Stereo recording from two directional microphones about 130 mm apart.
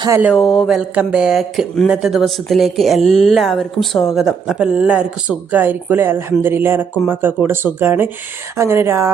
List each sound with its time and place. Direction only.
0.3 s speech: centre (ahead or behind); by 9.1 s 20° right (ahead or behind)